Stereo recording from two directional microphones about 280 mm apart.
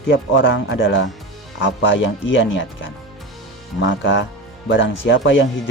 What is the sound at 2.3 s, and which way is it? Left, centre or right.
Speech, left.